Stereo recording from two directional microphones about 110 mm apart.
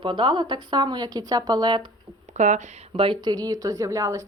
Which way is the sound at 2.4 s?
90° right.